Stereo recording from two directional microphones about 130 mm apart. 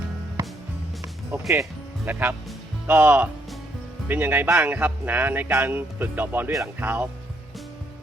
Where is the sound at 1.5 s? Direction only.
15° right (ahead or behind).